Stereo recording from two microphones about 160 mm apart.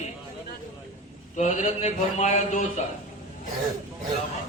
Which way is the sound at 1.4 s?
45° left (ahead or behind).